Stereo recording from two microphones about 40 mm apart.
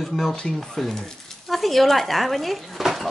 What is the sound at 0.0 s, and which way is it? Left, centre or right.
Speech, centre.